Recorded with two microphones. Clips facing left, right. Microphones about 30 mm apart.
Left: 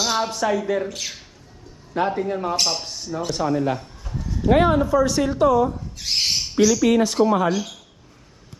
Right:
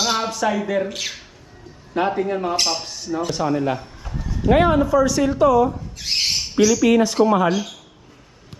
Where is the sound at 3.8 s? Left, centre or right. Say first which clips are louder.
Right 1 dB; right.